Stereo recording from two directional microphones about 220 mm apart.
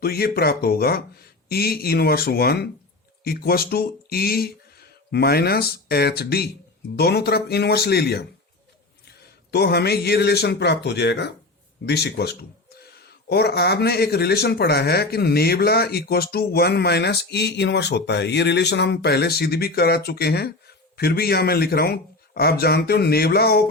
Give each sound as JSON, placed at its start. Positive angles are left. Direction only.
{"t": 0.0, "sound": "speech", "side_deg": 45}
{"t": 9.5, "sound": "speech", "side_deg": 45}